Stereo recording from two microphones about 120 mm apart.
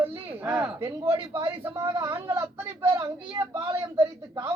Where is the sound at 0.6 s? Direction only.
25° right (ahead or behind).